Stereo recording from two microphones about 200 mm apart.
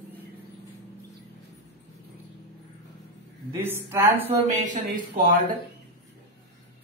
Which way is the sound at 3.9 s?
10° right (ahead or behind).